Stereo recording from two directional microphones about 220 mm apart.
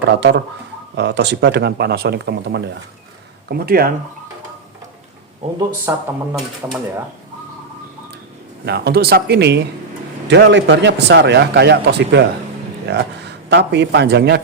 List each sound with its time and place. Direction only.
0.1 s a man's voice: 55° right (ahead or behind)
5.4 s speech: 30° right (ahead or behind)
5.9 s speech: 10° right (ahead or behind)
8.6 s a man's voice: 50° right (ahead or behind)